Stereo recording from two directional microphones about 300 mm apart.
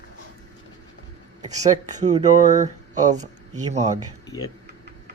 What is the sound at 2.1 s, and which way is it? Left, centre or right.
Speech, right.